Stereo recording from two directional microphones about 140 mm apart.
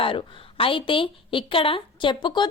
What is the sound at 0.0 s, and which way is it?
A woman's voice, 40° left (ahead or behind).